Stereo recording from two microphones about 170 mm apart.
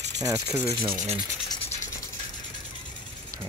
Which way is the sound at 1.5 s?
35° left (ahead or behind).